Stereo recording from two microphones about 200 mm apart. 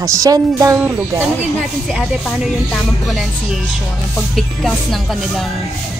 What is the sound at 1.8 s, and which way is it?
Speech, centre (ahead or behind).